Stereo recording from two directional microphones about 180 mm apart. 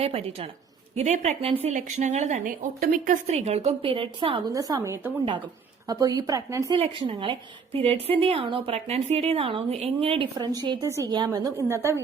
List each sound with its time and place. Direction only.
0.0 s a woman's voice: 35° right (ahead or behind)
4.5 s a woman's voice: 20° right (ahead or behind)
6.7 s a woman's voice: 30° right (ahead or behind)